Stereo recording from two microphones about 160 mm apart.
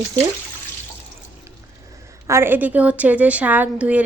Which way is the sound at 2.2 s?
15° right (ahead or behind).